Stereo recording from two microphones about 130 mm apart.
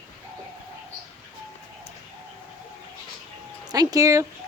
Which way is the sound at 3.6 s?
30° right (ahead or behind).